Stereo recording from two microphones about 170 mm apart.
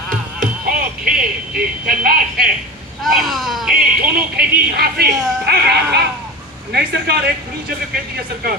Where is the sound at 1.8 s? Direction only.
55° right (ahead or behind).